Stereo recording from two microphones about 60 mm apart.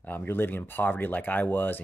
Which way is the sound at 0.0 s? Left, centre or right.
Left.